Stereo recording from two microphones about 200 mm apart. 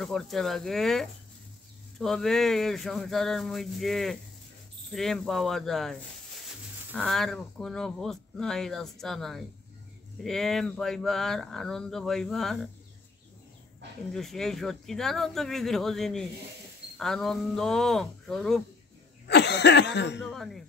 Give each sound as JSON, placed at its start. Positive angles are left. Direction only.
{"t": 0.0, "sound": "speech", "side_deg": 0}
{"t": 14.1, "sound": "speech", "side_deg": 0}
{"t": 19.2, "sound": "cough", "side_deg": 60}
{"t": 20.2, "sound": "speech", "side_deg": 0}